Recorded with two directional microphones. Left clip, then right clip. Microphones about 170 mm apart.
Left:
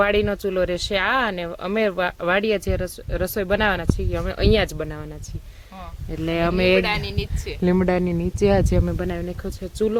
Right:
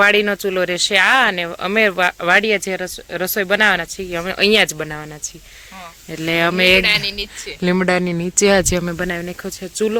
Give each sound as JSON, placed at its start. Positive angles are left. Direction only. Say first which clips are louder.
{"t": 0.0, "sound": "speech", "louder": "right 6 dB", "side_deg": -5}
{"t": 6.8, "sound": "speech", "louder": "right 8 dB", "side_deg": 50}
{"t": 7.6, "sound": "speech", "louder": "right 4 dB", "side_deg": 5}
{"t": 8.9, "sound": "speech", "louder": "right 5 dB", "side_deg": -5}